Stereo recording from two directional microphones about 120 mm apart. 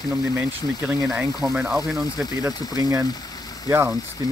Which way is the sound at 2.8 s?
25° right (ahead or behind).